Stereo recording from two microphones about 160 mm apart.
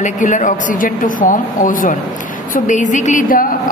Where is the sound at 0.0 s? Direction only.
50° left (ahead or behind).